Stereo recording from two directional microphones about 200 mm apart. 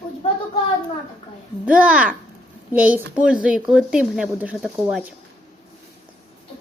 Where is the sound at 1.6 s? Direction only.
5° right (ahead or behind).